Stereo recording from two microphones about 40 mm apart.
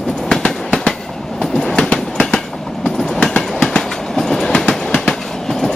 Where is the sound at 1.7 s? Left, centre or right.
Left.